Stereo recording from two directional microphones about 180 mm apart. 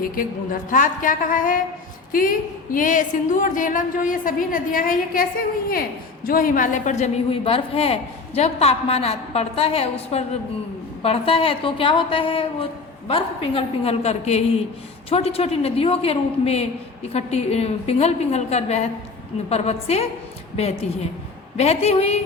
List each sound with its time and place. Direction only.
0.0 s a woman's voice: 50° left (ahead or behind)
21.6 s a woman's voice: 35° left (ahead or behind)